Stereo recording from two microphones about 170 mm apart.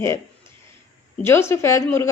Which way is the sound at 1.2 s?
15° left (ahead or behind).